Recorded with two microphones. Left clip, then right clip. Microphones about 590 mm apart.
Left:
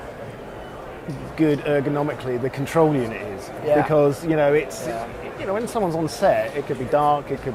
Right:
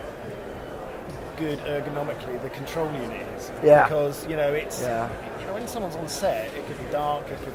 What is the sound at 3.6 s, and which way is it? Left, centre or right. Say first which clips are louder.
Speech: right 4 dB; right.